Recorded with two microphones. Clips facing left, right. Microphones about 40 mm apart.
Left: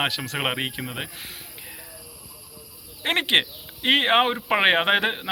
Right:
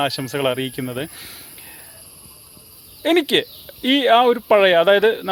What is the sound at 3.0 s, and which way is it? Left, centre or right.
Speech, left.